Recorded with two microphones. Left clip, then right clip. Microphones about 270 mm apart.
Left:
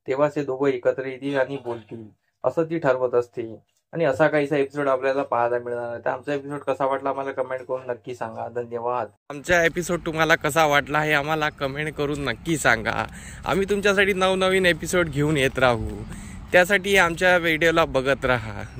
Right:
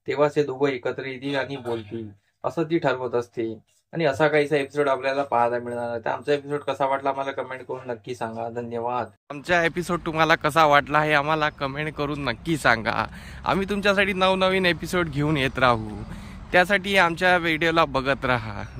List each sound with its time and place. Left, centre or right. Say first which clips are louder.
0.0 s speech: right 1 dB; centre
9.3 s speech: left 2 dB; centre